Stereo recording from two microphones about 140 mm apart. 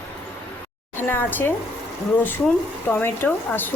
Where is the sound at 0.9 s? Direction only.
15° left (ahead or behind).